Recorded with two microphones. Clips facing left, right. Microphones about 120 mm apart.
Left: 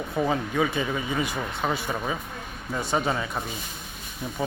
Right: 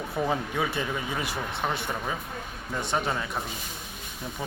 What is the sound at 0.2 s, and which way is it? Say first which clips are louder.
Speech: left 3 dB; centre (ahead or behind).